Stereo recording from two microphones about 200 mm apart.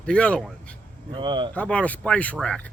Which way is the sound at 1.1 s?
25° right (ahead or behind).